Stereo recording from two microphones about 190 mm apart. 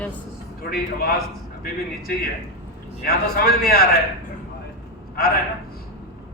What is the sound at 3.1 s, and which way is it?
Speech, 55° left (ahead or behind).